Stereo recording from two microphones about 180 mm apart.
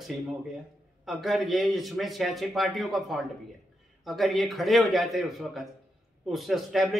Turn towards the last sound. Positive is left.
turn(degrees=0)  # may be behind; listen again after turning